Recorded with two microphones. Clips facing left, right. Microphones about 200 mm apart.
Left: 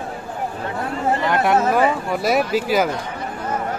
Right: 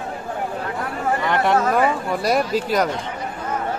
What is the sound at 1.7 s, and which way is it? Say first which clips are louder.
Speech: left 1 dB; centre (ahead or behind).